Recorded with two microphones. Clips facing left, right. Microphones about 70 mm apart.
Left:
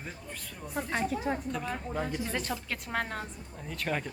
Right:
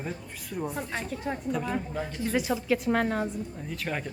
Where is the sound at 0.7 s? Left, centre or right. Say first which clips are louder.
Left 2 dB; centre.